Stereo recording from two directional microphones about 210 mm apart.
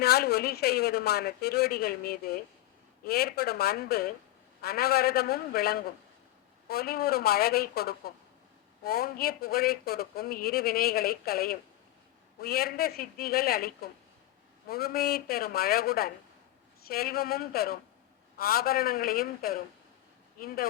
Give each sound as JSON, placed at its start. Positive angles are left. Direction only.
{"t": 0.0, "sound": "speech", "side_deg": 50}